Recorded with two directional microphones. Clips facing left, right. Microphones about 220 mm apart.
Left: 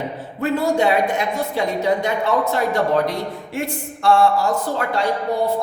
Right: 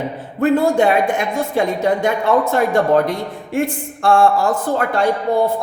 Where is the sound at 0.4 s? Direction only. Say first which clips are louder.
Right 4 dB; 50° right (ahead or behind).